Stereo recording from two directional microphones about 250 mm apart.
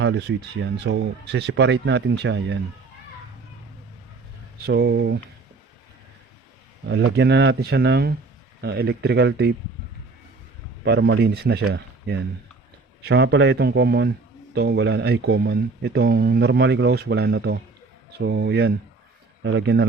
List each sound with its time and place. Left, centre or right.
0.0 s speech: right
4.6 s speech: right
6.8 s speech: right
10.8 s speech: right